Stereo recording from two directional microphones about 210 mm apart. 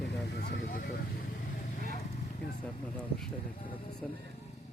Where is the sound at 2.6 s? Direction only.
5° left (ahead or behind).